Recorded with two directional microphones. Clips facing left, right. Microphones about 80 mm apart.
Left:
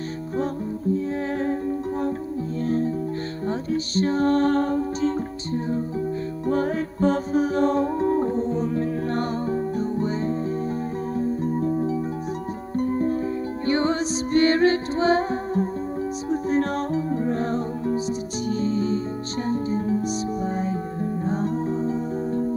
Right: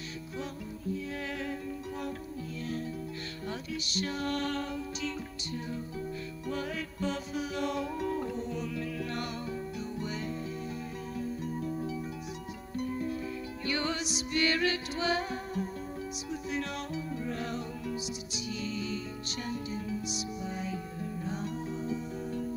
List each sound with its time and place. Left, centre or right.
0.9 s music: left